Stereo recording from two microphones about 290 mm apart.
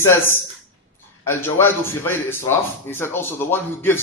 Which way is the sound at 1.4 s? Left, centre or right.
Centre.